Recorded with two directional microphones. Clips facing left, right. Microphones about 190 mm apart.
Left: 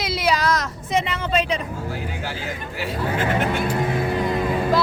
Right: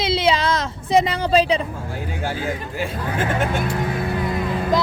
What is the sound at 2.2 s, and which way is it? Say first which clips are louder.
Speech: right 5 dB; 50° right (ahead or behind).